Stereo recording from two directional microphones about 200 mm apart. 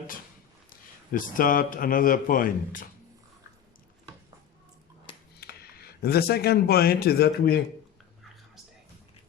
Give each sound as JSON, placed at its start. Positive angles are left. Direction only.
{"t": 1.1, "sound": "a man's voice", "side_deg": 45}
{"t": 5.4, "sound": "speech", "side_deg": 50}